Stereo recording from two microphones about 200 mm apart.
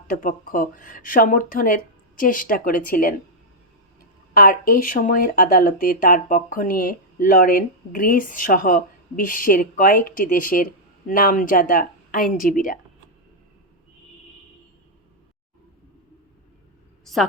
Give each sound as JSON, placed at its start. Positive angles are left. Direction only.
{"t": 0.1, "sound": "speech", "side_deg": 45}
{"t": 4.4, "sound": "speech", "side_deg": 45}